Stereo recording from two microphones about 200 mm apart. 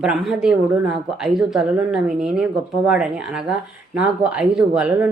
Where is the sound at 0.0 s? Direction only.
Centre (ahead or behind).